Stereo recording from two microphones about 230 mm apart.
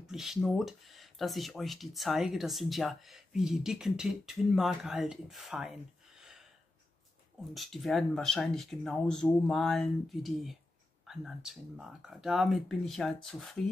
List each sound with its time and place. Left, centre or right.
0.0 s speech: centre
7.5 s speech: centre